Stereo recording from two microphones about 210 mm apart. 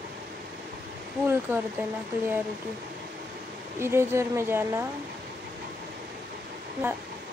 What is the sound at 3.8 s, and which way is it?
A woman's voice, 10° right (ahead or behind).